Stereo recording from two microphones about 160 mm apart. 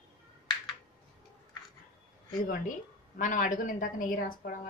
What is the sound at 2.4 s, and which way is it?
A woman's voice, 60° left (ahead or behind).